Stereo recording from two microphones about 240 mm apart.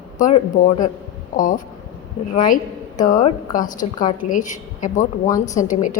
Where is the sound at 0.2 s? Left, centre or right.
Left.